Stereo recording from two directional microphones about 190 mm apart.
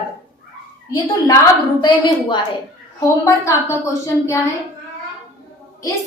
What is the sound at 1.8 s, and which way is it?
A woman's voice, 25° left (ahead or behind).